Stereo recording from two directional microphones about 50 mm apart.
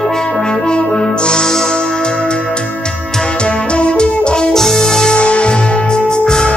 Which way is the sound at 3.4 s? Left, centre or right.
Left.